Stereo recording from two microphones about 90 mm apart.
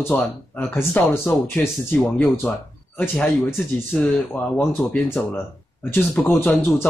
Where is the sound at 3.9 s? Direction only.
5° left (ahead or behind).